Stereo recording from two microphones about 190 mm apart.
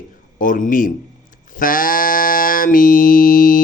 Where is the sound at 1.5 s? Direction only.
45° left (ahead or behind).